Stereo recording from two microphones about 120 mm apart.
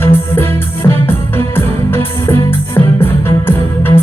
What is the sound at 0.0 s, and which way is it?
Music, 20° left (ahead or behind).